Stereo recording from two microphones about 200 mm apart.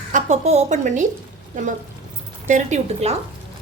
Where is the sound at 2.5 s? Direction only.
35° right (ahead or behind).